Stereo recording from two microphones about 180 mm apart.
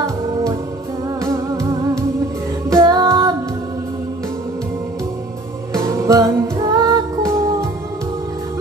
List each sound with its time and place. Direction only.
0.0 s music: 20° right (ahead or behind)
5.7 s music: 15° right (ahead or behind)